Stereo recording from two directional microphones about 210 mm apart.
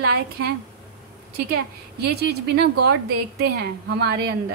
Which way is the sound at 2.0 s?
50° right (ahead or behind).